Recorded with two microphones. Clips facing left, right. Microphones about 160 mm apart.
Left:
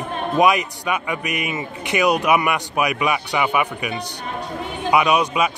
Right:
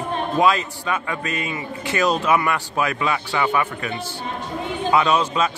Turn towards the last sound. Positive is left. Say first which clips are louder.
# left 1 dB
turn(degrees=15)  # may be behind; listen again after turning